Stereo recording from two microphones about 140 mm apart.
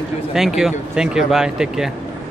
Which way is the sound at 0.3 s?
5° right (ahead or behind).